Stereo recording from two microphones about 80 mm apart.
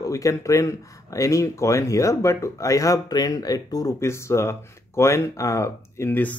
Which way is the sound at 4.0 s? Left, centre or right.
Left.